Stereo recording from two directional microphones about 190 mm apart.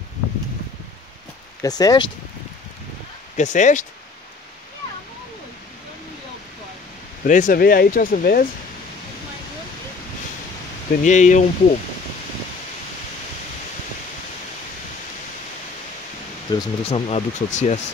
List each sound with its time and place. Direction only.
1.6 s speech: 20° left (ahead or behind)
3.3 s speech: 40° left (ahead or behind)
7.2 s speech: 40° left (ahead or behind)
10.9 s speech: 40° left (ahead or behind)
16.5 s speech: 30° left (ahead or behind)